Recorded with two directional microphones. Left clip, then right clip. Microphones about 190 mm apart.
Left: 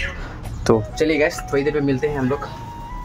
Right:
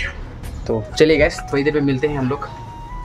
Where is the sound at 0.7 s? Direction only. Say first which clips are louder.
Left 5 dB; 35° left (ahead or behind).